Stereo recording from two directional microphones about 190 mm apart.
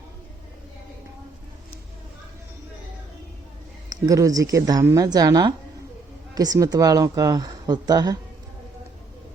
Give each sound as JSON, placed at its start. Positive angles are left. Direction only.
{"t": 3.8, "sound": "a woman's voice", "side_deg": -20}